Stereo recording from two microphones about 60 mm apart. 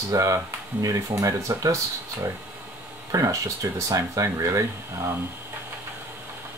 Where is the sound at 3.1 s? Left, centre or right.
Right.